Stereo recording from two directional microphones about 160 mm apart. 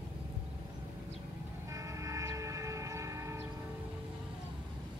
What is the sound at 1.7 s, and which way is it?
Train, 20° right (ahead or behind).